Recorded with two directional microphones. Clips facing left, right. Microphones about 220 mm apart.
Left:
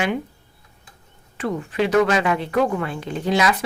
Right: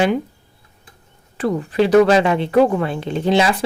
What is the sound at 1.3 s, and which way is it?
Speech, 35° right (ahead or behind).